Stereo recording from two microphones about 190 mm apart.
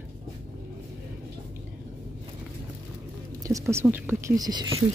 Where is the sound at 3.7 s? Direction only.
10° right (ahead or behind).